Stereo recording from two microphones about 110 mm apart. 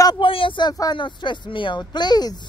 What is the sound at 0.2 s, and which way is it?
Speech, 50° left (ahead or behind).